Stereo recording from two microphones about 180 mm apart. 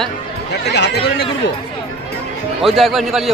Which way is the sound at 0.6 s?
70° left (ahead or behind).